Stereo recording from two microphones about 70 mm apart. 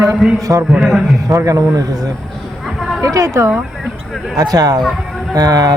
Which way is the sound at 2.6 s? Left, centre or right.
Centre.